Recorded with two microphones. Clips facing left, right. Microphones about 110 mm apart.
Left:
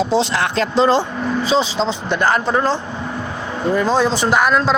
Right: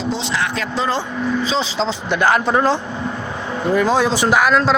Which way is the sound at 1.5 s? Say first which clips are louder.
Left 3 dB; centre (ahead or behind).